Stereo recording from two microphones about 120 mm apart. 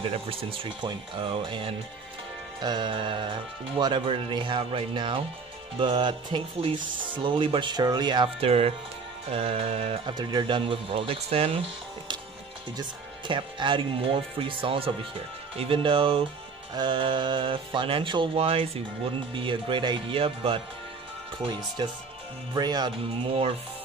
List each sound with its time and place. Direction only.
0.1 s speech: 50° right (ahead or behind)
8.5 s music: 55° right (ahead or behind)
10.0 s speech: 40° right (ahead or behind)
13.3 s speech: 45° right (ahead or behind)
21.8 s speech: 40° right (ahead or behind)